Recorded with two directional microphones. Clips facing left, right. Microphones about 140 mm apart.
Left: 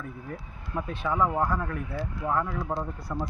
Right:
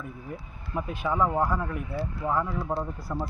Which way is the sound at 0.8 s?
5° right (ahead or behind).